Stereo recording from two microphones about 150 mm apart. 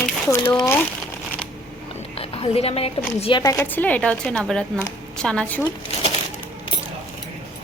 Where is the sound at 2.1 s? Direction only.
40° left (ahead or behind).